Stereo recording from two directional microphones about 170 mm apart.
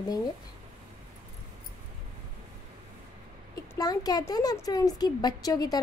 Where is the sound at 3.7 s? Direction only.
20° left (ahead or behind).